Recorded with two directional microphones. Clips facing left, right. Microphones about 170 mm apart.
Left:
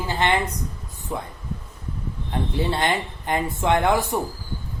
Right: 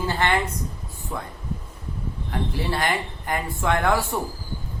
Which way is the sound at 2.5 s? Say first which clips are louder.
Left 3 dB; 20° left (ahead or behind).